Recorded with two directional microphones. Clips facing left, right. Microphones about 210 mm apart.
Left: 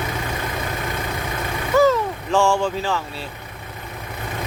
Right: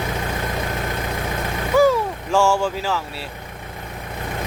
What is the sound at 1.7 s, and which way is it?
Speech, 10° right (ahead or behind).